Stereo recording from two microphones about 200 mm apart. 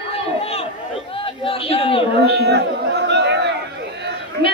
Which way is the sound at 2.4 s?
55° right (ahead or behind).